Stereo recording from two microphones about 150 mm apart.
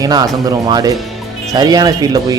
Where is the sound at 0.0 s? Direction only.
25° right (ahead or behind).